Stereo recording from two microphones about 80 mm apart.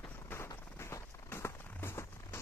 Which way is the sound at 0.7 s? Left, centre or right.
Left.